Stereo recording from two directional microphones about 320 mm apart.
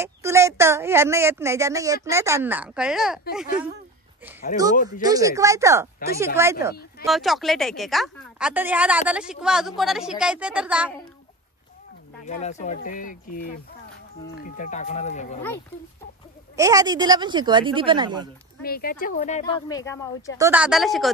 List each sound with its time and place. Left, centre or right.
0.0 s speech: centre
5.0 s speech: centre
12.3 s speech: left
16.5 s speech: centre
18.6 s speech: left; by 20.3 s centre
20.3 s speech: centre